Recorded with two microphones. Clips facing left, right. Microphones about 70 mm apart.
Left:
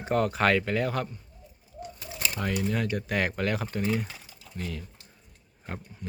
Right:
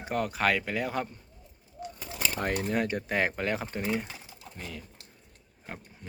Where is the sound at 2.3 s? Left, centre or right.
Right; by 4.2 s centre.